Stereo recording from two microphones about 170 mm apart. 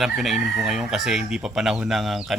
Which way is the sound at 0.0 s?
Centre (ahead or behind).